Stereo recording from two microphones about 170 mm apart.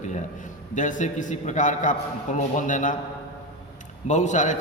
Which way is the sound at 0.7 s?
50° left (ahead or behind).